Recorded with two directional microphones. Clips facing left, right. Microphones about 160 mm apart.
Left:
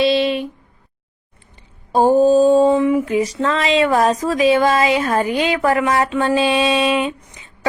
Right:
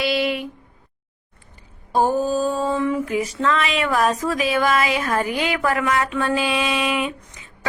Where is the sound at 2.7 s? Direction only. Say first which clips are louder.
Left 6 dB; 20° left (ahead or behind).